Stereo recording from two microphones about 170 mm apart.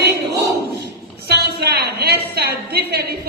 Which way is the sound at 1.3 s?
75° right (ahead or behind).